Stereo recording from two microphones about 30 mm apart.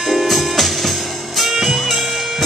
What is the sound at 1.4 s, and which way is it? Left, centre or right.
Music, centre.